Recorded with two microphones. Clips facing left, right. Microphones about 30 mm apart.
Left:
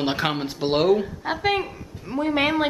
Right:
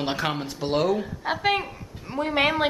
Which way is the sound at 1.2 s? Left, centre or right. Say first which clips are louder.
Left 1 dB; centre.